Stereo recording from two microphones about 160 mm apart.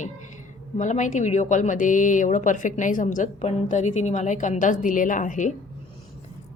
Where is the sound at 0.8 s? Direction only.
50° left (ahead or behind).